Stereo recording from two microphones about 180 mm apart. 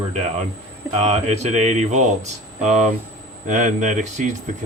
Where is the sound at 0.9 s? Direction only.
35° right (ahead or behind).